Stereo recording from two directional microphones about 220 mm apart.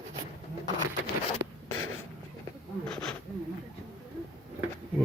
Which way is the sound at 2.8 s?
5° left (ahead or behind).